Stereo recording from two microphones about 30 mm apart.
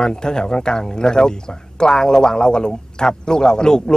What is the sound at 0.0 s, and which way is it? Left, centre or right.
Speech, left.